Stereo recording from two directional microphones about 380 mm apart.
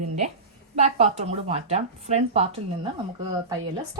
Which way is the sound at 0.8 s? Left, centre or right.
Centre.